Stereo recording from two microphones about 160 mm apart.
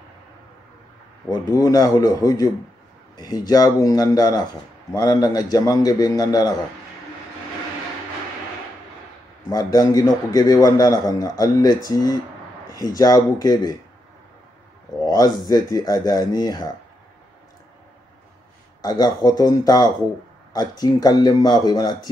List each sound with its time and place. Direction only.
1.3 s a man's voice: 25° left (ahead or behind)
9.5 s a man's voice: 25° left (ahead or behind)
15.0 s a man's voice: 25° left (ahead or behind)
18.8 s a man's voice: 25° left (ahead or behind)